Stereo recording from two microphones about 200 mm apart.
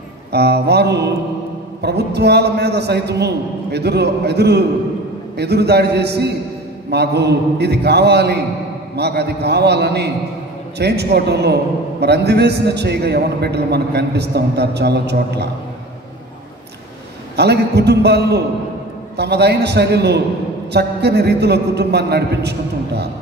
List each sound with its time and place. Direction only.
0.3 s a man's voice: 55° right (ahead or behind)
17.4 s a man's voice: 55° right (ahead or behind)